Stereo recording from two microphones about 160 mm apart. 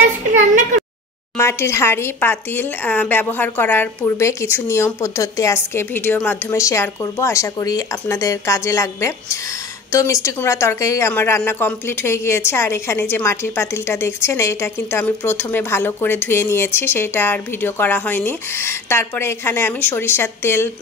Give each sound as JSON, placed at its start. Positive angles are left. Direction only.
{"t": 1.4, "sound": "speech", "side_deg": 15}